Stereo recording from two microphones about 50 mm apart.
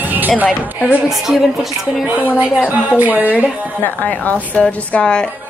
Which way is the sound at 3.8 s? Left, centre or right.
Left.